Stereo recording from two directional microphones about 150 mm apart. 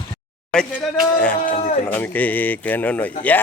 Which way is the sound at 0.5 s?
5° left (ahead or behind).